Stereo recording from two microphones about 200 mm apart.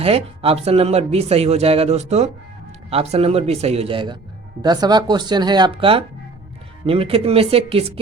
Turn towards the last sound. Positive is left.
turn(degrees=-30)  # may be behind; listen again after turning